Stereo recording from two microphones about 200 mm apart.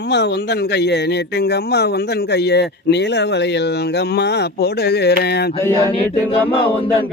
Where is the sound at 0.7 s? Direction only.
55° left (ahead or behind).